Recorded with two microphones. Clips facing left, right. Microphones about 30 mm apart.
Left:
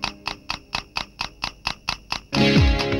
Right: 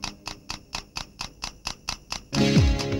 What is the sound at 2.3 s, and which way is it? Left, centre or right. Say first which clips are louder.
Music: left 4 dB; left.